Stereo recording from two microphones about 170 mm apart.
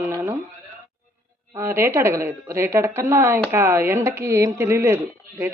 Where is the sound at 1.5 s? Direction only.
15° right (ahead or behind).